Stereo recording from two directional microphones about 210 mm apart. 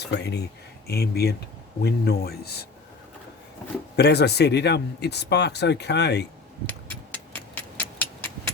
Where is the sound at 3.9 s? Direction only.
50° left (ahead or behind).